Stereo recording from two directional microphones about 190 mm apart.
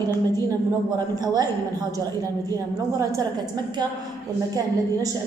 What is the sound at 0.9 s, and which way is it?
A woman's voice, 20° right (ahead or behind).